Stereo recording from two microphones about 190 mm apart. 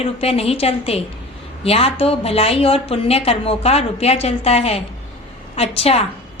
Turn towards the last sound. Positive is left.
turn(degrees=30)  # may be behind; listen again after turning